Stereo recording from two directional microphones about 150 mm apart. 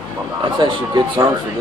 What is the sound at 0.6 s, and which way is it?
Speech, 30° right (ahead or behind).